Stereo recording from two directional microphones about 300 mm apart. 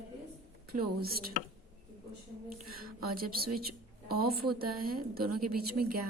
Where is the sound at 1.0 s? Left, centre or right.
Right.